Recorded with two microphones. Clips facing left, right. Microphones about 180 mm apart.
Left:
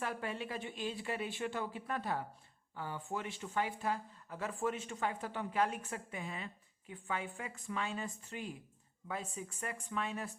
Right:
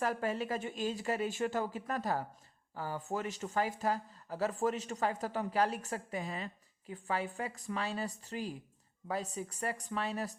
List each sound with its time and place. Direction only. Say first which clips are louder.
0.0 s speech: right 6 dB; 40° right (ahead or behind)